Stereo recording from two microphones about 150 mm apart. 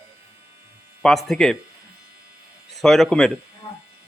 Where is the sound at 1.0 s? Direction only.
Centre (ahead or behind).